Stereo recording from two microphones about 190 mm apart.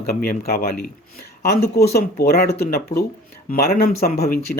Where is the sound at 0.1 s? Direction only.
55° left (ahead or behind).